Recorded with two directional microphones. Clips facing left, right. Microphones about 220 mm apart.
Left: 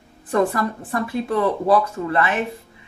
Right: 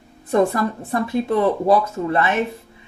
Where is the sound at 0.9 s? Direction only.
25° right (ahead or behind).